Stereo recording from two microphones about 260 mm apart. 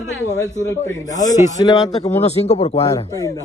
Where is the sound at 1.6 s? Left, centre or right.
Centre.